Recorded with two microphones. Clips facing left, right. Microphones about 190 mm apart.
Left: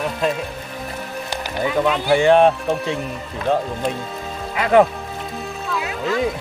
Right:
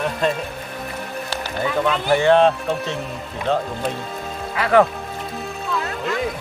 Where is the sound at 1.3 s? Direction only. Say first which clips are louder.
Left 2 dB; 15° left (ahead or behind).